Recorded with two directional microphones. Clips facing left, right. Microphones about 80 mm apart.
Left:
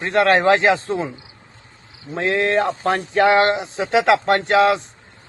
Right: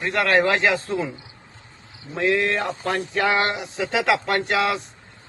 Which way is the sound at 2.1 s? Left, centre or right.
Left.